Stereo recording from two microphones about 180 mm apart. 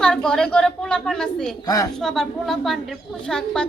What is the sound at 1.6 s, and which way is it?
Speech, 20° left (ahead or behind).